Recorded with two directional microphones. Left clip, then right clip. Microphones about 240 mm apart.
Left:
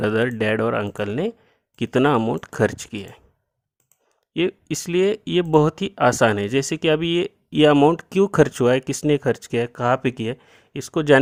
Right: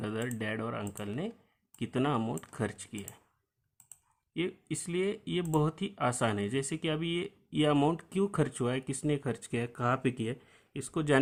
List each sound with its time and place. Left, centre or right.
0.0 s speech: left
4.4 s speech: left